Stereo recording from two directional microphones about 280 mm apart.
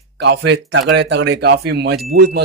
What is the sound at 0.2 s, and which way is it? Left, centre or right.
Speech, right.